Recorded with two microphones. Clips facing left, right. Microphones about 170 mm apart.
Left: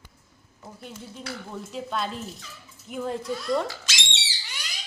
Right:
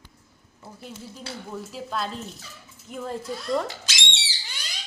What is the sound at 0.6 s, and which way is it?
Speech, centre (ahead or behind).